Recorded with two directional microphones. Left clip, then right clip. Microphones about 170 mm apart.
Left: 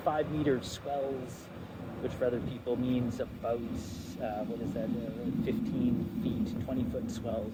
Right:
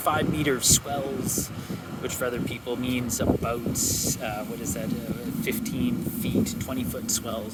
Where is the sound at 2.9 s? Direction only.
15° right (ahead or behind).